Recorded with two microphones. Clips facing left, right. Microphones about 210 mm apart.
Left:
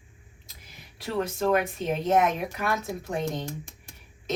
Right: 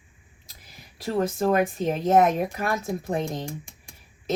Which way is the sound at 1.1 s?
40° right (ahead or behind).